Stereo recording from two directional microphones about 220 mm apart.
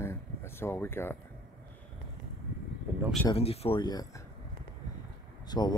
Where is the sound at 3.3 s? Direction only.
25° left (ahead or behind).